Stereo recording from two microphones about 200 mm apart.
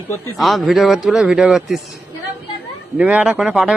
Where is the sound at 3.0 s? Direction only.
5° right (ahead or behind).